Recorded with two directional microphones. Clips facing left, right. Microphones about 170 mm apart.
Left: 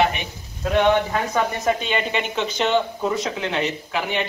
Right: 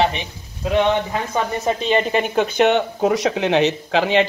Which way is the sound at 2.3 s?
60° right (ahead or behind).